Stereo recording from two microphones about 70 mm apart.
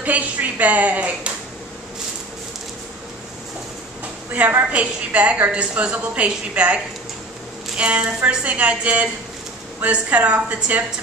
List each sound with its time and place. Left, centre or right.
0.0 s a woman's voice: right
4.3 s a woman's voice: right